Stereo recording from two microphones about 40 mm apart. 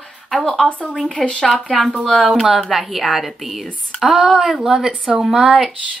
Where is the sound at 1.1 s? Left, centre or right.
Left.